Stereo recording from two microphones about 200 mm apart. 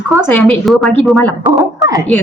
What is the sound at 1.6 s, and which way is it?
Speech, 15° right (ahead or behind).